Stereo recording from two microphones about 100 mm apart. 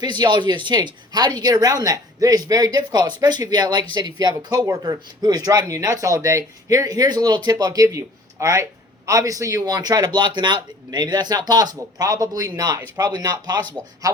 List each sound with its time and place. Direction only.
0.0 s speech: 45° right (ahead or behind)